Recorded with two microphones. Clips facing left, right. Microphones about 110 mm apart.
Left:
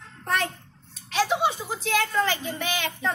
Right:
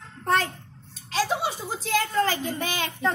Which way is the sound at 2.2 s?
40° right (ahead or behind).